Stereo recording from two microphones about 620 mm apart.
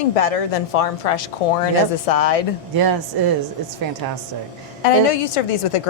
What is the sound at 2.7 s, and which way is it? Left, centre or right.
Speech, right.